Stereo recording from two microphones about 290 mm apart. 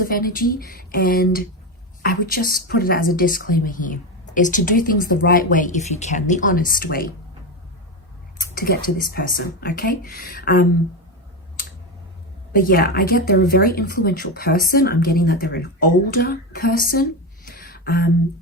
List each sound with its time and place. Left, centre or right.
0.0 s speech: left
8.4 s speech: left
12.5 s speech: left